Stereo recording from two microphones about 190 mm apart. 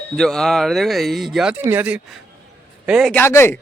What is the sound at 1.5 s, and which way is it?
Speech, 10° right (ahead or behind).